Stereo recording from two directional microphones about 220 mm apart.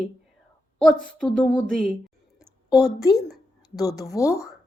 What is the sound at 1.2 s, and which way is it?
A woman's voice, 5° left (ahead or behind).